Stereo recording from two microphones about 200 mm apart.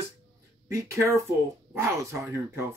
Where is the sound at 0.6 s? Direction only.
15° right (ahead or behind).